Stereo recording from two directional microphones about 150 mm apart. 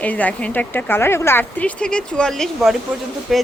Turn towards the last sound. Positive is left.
turn(degrees=0)  # may be behind; listen again after turning